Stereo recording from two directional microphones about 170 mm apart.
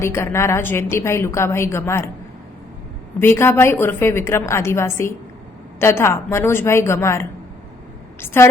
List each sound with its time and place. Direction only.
0.0 s a woman's voice: 15° left (ahead or behind)
3.2 s a woman's voice: 15° left (ahead or behind)